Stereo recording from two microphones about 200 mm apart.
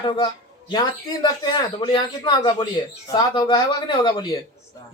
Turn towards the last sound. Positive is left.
turn(degrees=20)  # may be behind; listen again after turning